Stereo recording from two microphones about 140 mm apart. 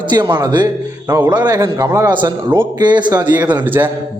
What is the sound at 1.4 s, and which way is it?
A man's voice, 30° right (ahead or behind).